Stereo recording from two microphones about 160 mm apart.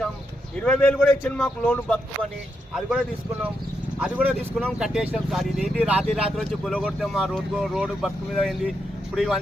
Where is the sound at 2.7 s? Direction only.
Centre (ahead or behind).